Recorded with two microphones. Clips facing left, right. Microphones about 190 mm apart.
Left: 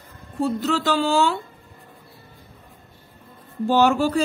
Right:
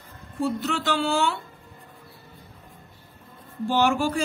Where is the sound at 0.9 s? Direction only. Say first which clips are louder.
Left 3 dB; 35° left (ahead or behind).